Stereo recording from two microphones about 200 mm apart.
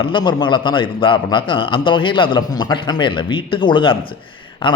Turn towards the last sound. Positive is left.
turn(degrees=25)  # may be behind; listen again after turning